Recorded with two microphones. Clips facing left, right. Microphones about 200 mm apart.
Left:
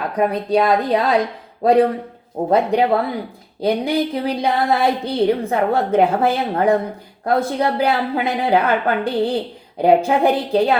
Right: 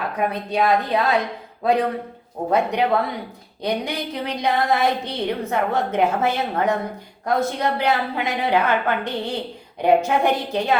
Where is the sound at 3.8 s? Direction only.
35° left (ahead or behind).